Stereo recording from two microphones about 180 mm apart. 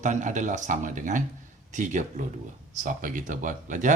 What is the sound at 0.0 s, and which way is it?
Speech, 40° right (ahead or behind).